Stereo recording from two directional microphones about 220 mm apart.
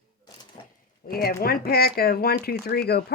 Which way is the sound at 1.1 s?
45° left (ahead or behind).